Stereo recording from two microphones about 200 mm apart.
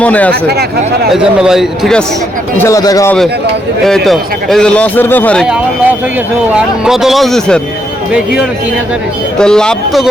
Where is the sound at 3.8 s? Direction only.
Centre (ahead or behind).